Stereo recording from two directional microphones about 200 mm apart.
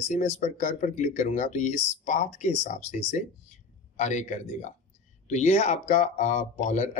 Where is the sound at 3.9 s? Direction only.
35° left (ahead or behind).